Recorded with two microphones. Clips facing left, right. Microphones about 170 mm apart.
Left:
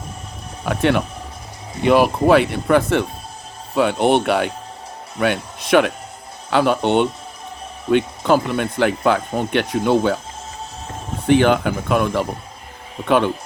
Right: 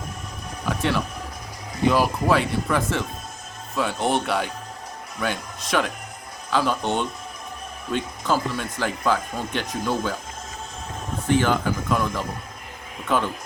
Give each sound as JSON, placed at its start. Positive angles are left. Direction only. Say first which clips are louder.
{"t": 0.6, "sound": "speech", "louder": "left 6 dB", "side_deg": 60}
{"t": 11.3, "sound": "speech", "louder": "left 6 dB", "side_deg": 65}